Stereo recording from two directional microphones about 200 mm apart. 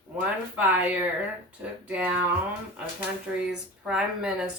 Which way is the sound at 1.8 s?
5° right (ahead or behind).